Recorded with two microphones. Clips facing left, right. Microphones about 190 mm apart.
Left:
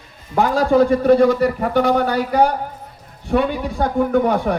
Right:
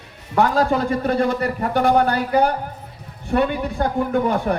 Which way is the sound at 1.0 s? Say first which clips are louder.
Left 7 dB; 55° right (ahead or behind).